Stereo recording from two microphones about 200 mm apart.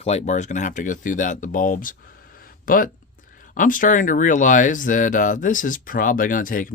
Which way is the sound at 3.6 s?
40° left (ahead or behind).